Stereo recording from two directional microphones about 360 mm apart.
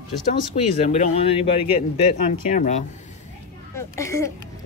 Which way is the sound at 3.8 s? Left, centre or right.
Centre.